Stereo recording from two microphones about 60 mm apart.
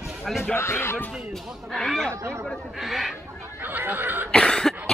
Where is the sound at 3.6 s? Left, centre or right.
Right.